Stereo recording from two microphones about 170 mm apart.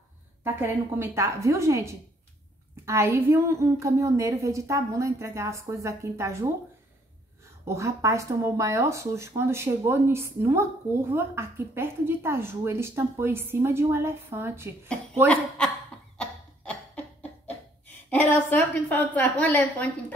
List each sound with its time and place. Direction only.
0.4 s speech: 15° right (ahead or behind)
7.6 s speech: 15° right (ahead or behind)
15.2 s speech: 5° left (ahead or behind)
16.2 s a sound: 10° left (ahead or behind)
18.1 s a woman's voice: 10° left (ahead or behind)